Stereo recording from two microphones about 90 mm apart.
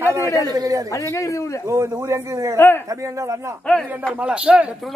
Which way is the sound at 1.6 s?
30° right (ahead or behind).